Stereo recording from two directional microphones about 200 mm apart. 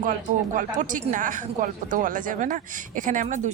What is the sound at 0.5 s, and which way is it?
Speech, 40° right (ahead or behind).